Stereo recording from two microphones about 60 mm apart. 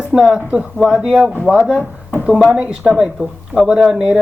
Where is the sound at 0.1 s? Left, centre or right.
Centre.